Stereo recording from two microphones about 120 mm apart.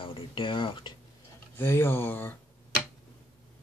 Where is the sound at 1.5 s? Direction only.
20° left (ahead or behind).